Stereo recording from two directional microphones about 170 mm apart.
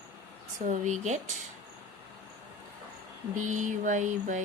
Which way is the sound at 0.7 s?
45° right (ahead or behind).